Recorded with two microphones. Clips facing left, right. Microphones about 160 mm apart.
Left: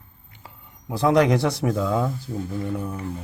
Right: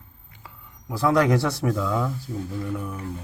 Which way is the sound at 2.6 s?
25° left (ahead or behind).